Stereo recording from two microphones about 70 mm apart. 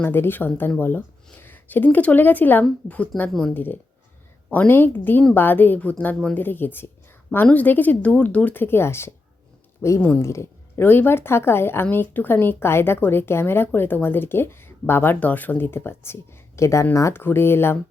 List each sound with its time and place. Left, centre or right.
0.0 s speech: left
3.2 s speech: centre
3.5 s speech: left
17.2 s speech: left